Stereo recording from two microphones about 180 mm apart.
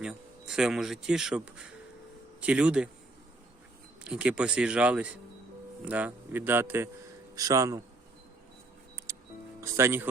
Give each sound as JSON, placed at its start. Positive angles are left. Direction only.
{"t": 0.0, "sound": "speech", "side_deg": -5}
{"t": 4.0, "sound": "speech", "side_deg": -5}
{"t": 9.6, "sound": "speech", "side_deg": -15}